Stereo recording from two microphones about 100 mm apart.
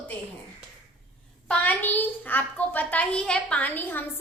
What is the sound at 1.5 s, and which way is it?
A child's voice, 20° left (ahead or behind).